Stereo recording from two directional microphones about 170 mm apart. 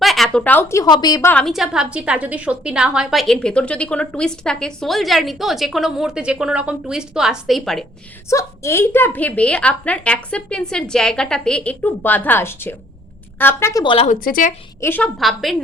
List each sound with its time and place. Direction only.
0.0 s a woman's voice: centre (ahead or behind)
8.3 s a woman's voice: 15° left (ahead or behind)
13.8 s speech: 35° left (ahead or behind)
14.1 s speech: 55° left (ahead or behind)
14.8 s a woman's voice: 10° left (ahead or behind)
15.2 s a woman's voice: centre (ahead or behind)